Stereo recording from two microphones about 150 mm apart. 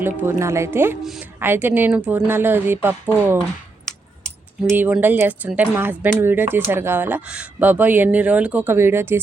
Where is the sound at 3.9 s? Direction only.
5° left (ahead or behind).